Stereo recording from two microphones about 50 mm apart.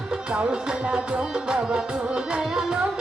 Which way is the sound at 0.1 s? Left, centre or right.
Centre.